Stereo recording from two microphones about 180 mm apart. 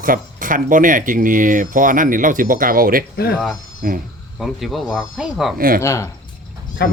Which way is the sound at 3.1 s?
60° left (ahead or behind).